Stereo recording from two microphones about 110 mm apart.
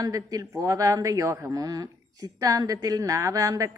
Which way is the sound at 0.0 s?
35° right (ahead or behind).